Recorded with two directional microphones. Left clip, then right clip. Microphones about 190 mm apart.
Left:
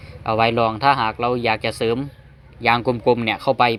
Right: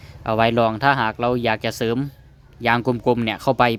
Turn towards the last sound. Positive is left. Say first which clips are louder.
# left 1 dB
turn(degrees=-40)  # may be behind; listen again after turning